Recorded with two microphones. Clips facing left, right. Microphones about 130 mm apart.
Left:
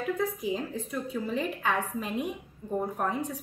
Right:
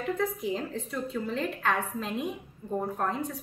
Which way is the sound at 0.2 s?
10° left (ahead or behind).